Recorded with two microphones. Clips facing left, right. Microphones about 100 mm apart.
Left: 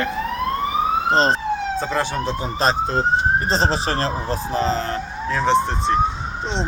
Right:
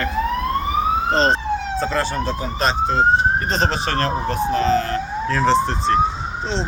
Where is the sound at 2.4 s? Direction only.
35° left (ahead or behind).